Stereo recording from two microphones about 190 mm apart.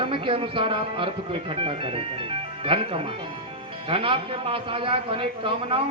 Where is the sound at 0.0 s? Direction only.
30° right (ahead or behind).